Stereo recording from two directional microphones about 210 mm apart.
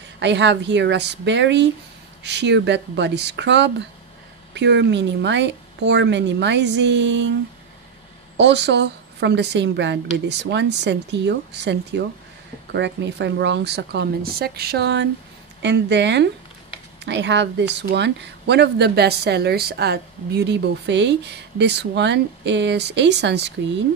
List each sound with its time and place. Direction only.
0.2 s speech: 55° right (ahead or behind)
8.4 s speech: 55° right (ahead or behind)